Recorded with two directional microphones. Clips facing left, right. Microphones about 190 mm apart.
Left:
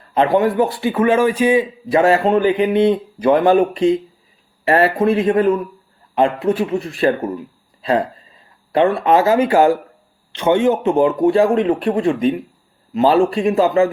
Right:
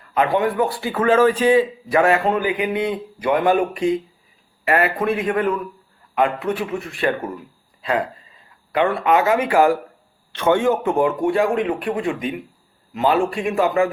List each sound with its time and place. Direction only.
0.1 s speech: 30° left (ahead or behind)
2.0 s speech: 25° left (ahead or behind)